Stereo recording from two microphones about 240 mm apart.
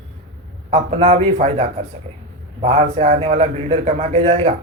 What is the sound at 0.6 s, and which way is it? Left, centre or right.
A man's voice, right.